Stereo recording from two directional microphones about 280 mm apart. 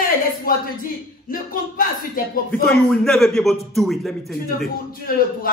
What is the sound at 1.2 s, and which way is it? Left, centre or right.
Speech, left.